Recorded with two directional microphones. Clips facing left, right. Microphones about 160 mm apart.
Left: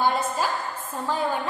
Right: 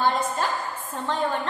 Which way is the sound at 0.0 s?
10° left (ahead or behind).